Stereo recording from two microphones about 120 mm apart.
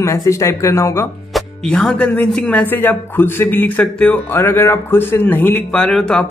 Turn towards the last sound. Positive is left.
turn(degrees=5)  # may be behind; listen again after turning